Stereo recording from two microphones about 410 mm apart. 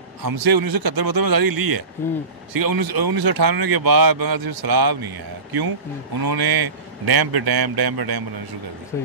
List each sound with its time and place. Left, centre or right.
0.2 s speech: right